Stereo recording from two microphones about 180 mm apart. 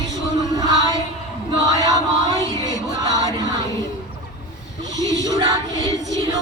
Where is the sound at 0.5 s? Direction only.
20° right (ahead or behind).